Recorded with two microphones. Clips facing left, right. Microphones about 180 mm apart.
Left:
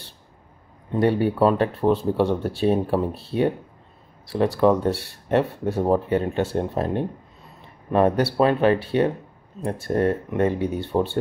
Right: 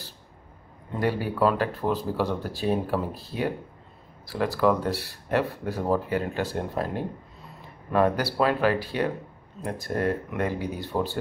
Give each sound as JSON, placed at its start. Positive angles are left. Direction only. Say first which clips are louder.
{"t": 0.9, "sound": "speech", "louder": "left 6 dB", "side_deg": 25}